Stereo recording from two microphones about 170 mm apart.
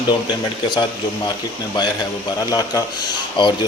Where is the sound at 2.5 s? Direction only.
20° left (ahead or behind).